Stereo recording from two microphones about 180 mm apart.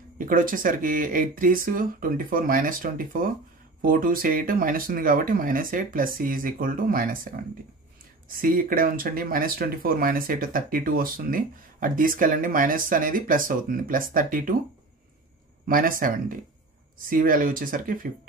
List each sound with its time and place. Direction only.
0.2 s speech: 50° right (ahead or behind)
15.7 s speech: 50° right (ahead or behind)